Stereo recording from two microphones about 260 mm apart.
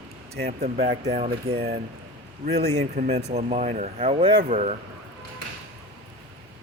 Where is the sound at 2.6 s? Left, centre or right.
Right.